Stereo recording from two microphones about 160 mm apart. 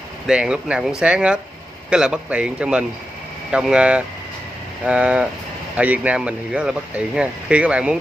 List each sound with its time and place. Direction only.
0.3 s speech: 5° right (ahead or behind)